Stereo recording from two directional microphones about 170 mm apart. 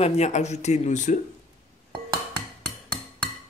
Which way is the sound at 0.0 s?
40° left (ahead or behind).